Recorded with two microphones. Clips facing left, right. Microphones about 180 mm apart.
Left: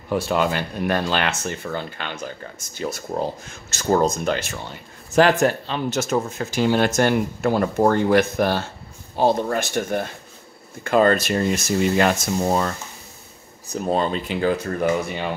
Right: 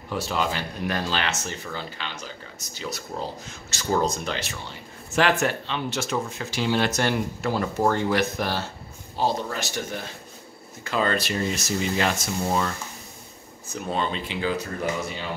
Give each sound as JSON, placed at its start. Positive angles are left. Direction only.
{"t": 0.1, "sound": "speech", "side_deg": 55}
{"t": 13.7, "sound": "speech", "side_deg": 40}